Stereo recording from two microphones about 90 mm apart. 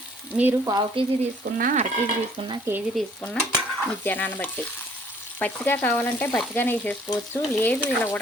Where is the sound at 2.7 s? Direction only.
30° right (ahead or behind).